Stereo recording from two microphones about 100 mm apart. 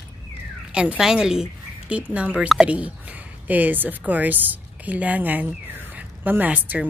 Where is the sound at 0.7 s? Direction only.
10° right (ahead or behind).